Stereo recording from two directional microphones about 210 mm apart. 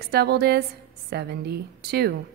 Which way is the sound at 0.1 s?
50° right (ahead or behind).